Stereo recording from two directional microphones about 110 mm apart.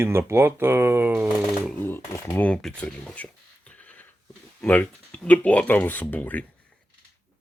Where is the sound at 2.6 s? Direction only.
5° left (ahead or behind).